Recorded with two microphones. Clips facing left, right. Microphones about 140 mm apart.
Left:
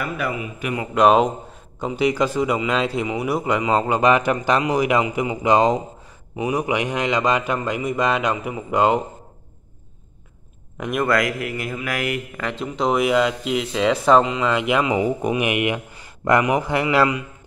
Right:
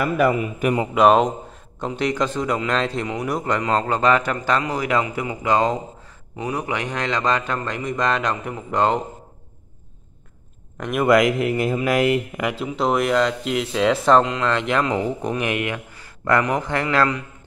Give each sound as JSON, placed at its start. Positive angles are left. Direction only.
{"t": 0.2, "sound": "a man's voice", "side_deg": -45}
{"t": 0.9, "sound": "a man's voice", "side_deg": 0}
{"t": 10.8, "sound": "speech", "side_deg": 0}
{"t": 11.1, "sound": "speech", "side_deg": -20}
{"t": 12.4, "sound": "a man's voice", "side_deg": -10}